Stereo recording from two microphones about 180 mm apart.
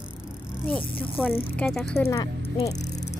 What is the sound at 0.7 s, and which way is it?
Speech, 10° left (ahead or behind).